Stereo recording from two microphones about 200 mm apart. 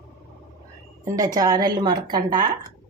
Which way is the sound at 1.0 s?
15° right (ahead or behind).